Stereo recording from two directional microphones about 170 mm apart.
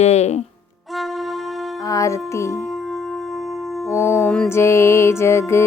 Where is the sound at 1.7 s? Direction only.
20° left (ahead or behind).